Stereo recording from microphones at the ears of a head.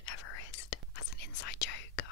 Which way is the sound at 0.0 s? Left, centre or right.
Left.